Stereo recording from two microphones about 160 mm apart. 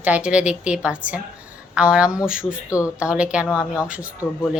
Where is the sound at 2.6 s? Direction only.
20° left (ahead or behind).